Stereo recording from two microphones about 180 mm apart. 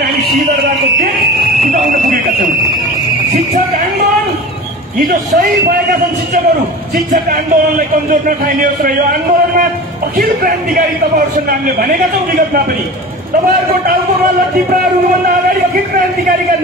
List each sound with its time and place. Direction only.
1.6 s fire alarm: 50° right (ahead or behind)
4.9 s speech: 50° right (ahead or behind)
7.1 s speech: 50° right (ahead or behind)
10.1 s speech: 50° right (ahead or behind)